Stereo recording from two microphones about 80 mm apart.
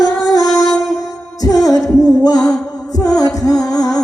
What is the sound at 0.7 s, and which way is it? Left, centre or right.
Music, centre.